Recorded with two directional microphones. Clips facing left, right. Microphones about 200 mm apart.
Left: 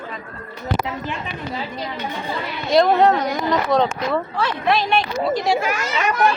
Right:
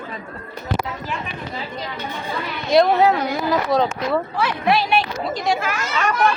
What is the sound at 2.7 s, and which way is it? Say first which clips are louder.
Speech: even; centre (ahead or behind).